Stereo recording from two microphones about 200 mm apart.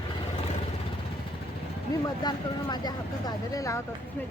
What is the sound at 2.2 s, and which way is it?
Speech, 20° left (ahead or behind).